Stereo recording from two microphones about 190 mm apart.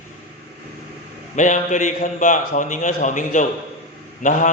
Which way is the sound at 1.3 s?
40° left (ahead or behind).